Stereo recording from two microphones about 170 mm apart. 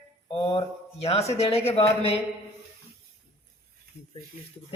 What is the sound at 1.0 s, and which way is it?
Speech, 35° left (ahead or behind).